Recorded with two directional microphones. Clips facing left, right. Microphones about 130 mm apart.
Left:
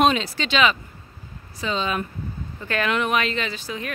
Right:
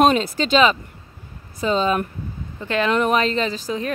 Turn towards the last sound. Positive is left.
turn(degrees=-35)  # may be behind; listen again after turning